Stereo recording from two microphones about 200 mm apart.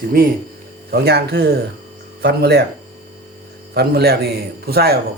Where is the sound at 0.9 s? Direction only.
55° right (ahead or behind).